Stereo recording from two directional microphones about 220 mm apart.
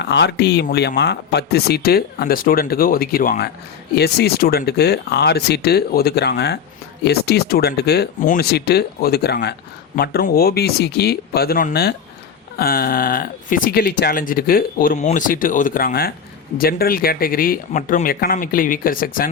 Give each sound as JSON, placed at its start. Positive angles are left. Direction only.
{"t": 0.0, "sound": "speech", "side_deg": 50}